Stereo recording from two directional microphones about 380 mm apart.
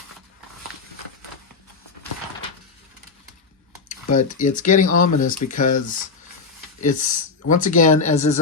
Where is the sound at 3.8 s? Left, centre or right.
Centre.